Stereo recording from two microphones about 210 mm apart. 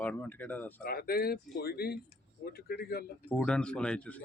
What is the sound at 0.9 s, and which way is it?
Speech, 45° left (ahead or behind).